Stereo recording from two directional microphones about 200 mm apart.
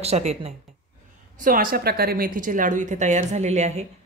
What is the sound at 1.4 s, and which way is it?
Speech, 45° right (ahead or behind).